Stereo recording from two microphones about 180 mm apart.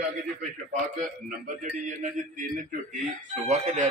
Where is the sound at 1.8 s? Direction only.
45° right (ahead or behind).